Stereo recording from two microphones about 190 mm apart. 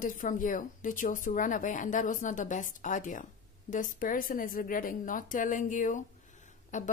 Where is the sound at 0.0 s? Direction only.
45° left (ahead or behind).